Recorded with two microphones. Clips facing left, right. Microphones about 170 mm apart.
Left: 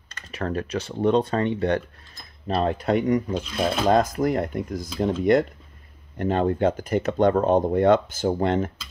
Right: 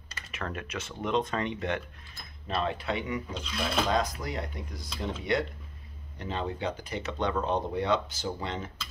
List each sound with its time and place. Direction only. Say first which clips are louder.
0.3 s speech: left 10 dB; 35° left (ahead or behind); by 8.7 s 50° left (ahead or behind)